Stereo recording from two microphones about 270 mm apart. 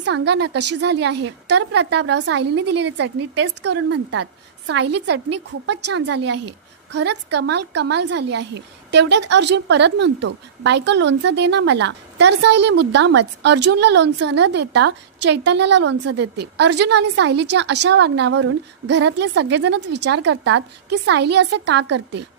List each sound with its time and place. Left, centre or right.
0.0 s a woman's voice: right
5.9 s a woman's voice: right